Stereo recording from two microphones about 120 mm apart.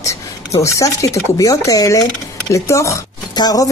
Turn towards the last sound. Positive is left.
turn(degrees=30)  # may be behind; listen again after turning